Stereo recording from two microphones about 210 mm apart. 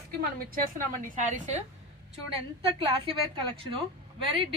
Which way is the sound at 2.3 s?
25° right (ahead or behind).